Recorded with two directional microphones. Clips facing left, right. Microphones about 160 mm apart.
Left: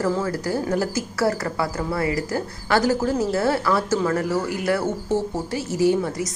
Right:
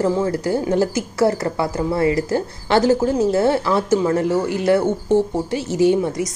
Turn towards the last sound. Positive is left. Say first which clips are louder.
# right 4 dB
turn(degrees=-20)  # may be behind; listen again after turning